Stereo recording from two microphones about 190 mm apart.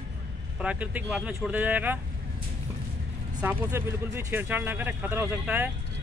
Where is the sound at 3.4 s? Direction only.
15° right (ahead or behind).